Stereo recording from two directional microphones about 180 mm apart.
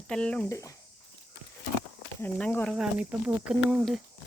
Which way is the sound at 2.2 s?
10° left (ahead or behind).